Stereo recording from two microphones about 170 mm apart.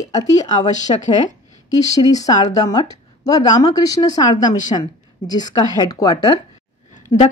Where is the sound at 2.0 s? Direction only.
20° left (ahead or behind).